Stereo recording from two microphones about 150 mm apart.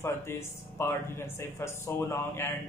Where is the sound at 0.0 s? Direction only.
15° left (ahead or behind).